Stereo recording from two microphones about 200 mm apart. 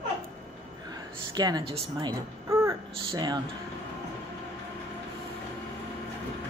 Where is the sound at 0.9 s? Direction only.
20° right (ahead or behind).